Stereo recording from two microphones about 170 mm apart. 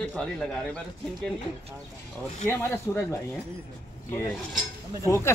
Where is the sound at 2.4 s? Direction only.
15° left (ahead or behind).